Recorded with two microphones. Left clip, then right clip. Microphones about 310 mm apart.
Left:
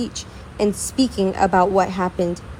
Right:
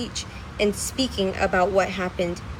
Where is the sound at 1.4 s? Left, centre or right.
Left.